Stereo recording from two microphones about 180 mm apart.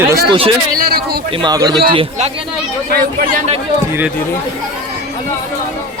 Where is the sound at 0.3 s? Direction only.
30° right (ahead or behind).